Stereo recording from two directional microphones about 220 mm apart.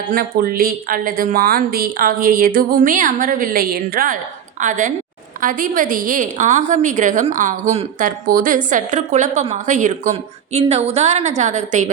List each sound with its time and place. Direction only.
0.1 s a woman's voice: 40° right (ahead or behind)